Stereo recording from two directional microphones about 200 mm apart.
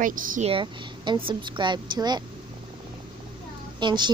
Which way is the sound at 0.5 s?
25° right (ahead or behind).